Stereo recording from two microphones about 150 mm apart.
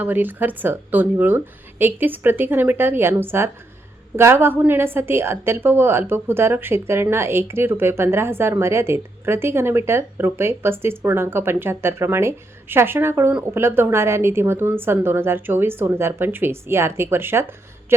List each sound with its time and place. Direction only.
0.0 s a woman's voice: 10° right (ahead or behind)